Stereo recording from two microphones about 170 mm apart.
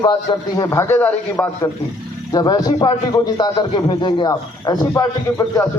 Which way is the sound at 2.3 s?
20° left (ahead or behind).